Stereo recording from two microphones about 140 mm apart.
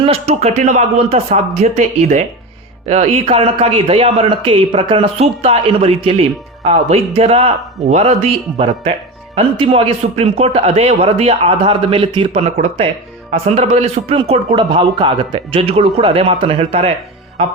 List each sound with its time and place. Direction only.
0.0 s speech: 45° right (ahead or behind)
14.2 s speech: 35° right (ahead or behind)